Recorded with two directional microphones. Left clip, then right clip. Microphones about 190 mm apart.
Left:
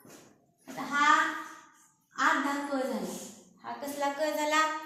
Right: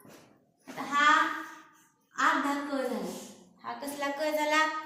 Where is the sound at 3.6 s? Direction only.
20° left (ahead or behind).